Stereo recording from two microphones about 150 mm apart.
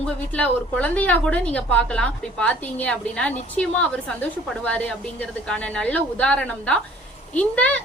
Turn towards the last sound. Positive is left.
turn(degrees=10)  # may be behind; listen again after turning